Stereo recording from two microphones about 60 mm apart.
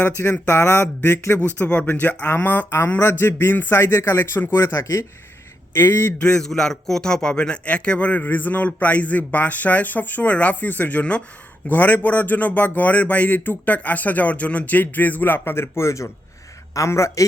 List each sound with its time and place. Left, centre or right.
0.2 s speech: left
1.5 s a man's voice: left
4.5 s speech: left
6.1 s a man's voice: centre; by 17.2 s left